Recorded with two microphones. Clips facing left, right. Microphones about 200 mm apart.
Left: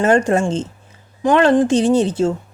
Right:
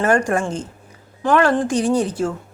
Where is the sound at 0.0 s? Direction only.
25° left (ahead or behind).